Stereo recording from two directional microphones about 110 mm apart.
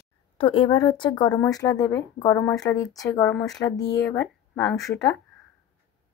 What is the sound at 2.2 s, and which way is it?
Speech, 20° left (ahead or behind).